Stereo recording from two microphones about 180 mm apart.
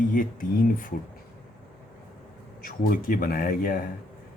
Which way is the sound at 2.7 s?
55° left (ahead or behind).